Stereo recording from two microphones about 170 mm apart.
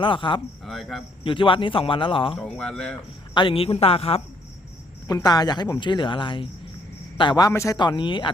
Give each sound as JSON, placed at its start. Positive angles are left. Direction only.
{"t": 0.0, "sound": "speech", "side_deg": 30}
{"t": 0.6, "sound": "speech", "side_deg": 0}
{"t": 1.2, "sound": "a man's voice", "side_deg": 30}
{"t": 2.6, "sound": "a man's voice", "side_deg": 5}
{"t": 3.3, "sound": "a man's voice", "side_deg": 30}
{"t": 5.0, "sound": "speech", "side_deg": 20}